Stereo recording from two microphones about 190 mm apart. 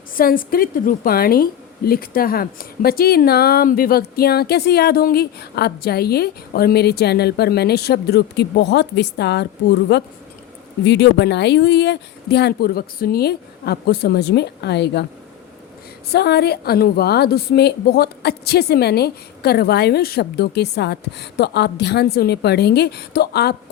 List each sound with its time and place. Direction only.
0.2 s a woman's voice: 50° left (ahead or behind)
16.1 s a woman's voice: 60° left (ahead or behind)